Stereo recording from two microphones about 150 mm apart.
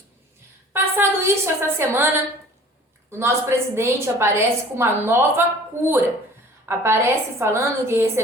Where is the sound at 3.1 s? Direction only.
15° right (ahead or behind).